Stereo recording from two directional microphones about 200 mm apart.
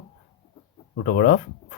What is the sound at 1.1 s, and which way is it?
Speech, 50° left (ahead or behind).